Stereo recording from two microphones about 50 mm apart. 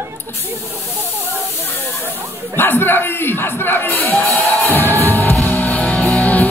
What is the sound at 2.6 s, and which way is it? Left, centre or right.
Speech, left.